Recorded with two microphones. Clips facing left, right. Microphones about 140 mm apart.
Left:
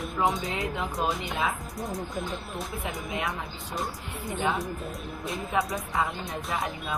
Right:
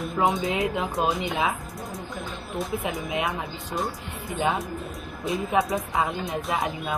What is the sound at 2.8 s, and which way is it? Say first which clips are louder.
Speech: right 4 dB; 20° right (ahead or behind).